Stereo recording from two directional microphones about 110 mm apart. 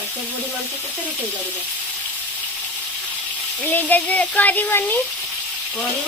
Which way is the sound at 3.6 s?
15° left (ahead or behind).